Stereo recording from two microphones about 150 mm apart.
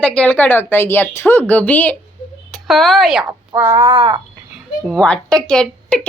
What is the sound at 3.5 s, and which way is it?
Crow, 15° right (ahead or behind).